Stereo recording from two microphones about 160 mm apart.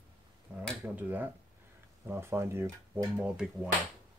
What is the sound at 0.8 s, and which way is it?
Speech, 10° right (ahead or behind).